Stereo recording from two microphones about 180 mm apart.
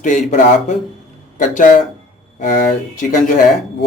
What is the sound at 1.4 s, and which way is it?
Speech, 45° left (ahead or behind).